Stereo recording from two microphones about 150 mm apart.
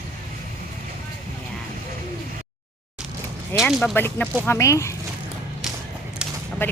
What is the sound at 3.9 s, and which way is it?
Speech, 15° left (ahead or behind).